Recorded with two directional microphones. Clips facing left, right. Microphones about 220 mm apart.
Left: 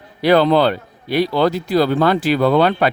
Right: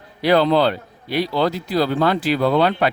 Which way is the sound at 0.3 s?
55° left (ahead or behind).